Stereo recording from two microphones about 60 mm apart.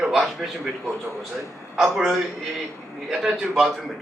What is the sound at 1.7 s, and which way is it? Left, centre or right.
A man's voice, centre.